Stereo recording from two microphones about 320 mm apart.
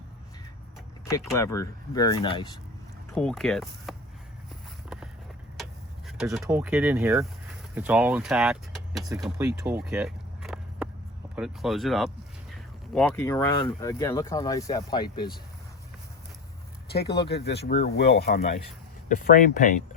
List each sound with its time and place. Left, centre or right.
1.2 s speech: centre
3.2 s speech: centre
6.1 s speech: centre
9.2 s vehicle: centre
11.3 s speech: centre
16.9 s speech: left